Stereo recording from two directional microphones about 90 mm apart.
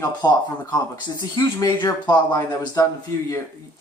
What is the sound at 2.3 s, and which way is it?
Speech, 40° left (ahead or behind).